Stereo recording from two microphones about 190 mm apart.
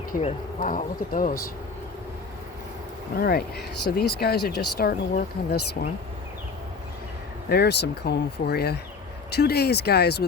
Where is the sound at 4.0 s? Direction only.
55° left (ahead or behind).